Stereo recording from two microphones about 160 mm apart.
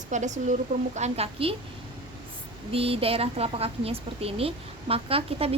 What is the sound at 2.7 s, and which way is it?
A woman's voice, 35° right (ahead or behind).